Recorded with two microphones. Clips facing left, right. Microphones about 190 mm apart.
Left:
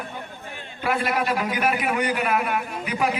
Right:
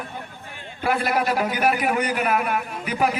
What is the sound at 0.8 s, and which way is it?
A man's voice, 45° right (ahead or behind).